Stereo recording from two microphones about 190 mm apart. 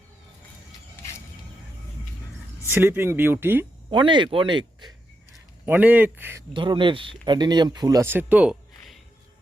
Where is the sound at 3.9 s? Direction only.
25° right (ahead or behind).